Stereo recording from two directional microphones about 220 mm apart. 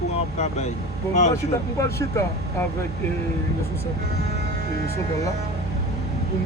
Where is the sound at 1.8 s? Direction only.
15° left (ahead or behind).